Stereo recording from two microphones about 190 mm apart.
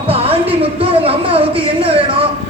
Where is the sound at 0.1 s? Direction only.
30° right (ahead or behind).